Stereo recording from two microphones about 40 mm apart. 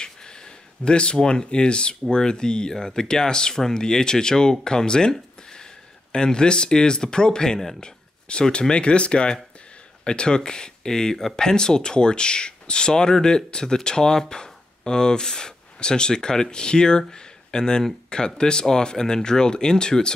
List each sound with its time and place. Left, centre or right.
0.0 s speech: centre
5.1 s a sound: centre
6.1 s speech: centre